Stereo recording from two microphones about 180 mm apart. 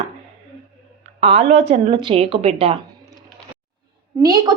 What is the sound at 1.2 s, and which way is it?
A woman's voice, 35° right (ahead or behind).